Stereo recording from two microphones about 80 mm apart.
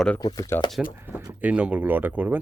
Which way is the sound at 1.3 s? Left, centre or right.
Centre.